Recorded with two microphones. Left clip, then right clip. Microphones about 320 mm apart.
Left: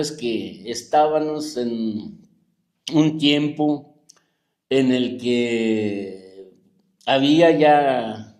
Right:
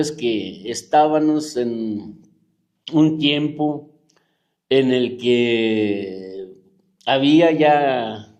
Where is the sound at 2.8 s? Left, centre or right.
Centre.